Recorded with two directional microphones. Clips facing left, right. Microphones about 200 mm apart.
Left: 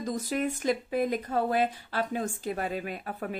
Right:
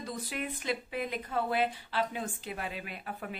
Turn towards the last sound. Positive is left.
turn(degrees=45)  # may be behind; listen again after turning